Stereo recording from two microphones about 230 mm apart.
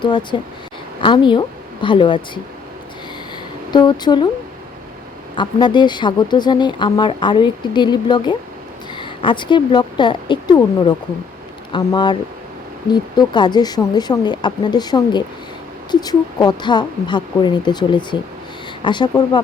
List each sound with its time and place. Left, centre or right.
0.0 s a woman's voice: centre
3.7 s speech: centre
5.3 s speech: left